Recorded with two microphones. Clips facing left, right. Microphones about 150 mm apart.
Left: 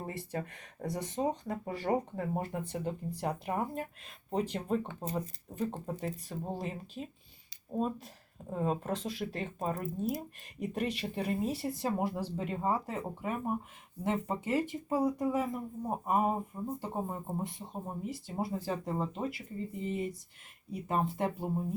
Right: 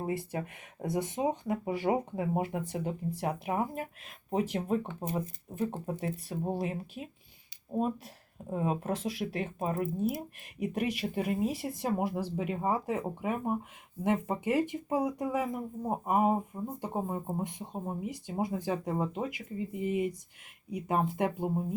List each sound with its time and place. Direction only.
0.0 s speech: 10° right (ahead or behind)